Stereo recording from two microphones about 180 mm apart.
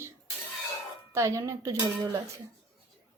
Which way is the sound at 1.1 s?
15° right (ahead or behind).